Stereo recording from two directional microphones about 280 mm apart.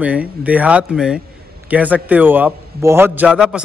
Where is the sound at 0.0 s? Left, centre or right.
Centre.